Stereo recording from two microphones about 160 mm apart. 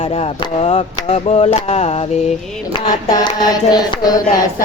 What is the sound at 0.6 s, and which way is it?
Chop, 35° left (ahead or behind).